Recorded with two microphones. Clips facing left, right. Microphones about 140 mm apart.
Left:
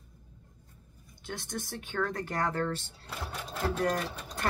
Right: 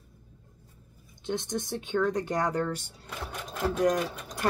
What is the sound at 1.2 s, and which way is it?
Speech, 20° right (ahead or behind).